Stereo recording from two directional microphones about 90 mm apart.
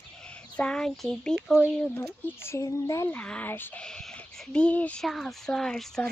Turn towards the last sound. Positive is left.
turn(degrees=5)  # may be behind; listen again after turning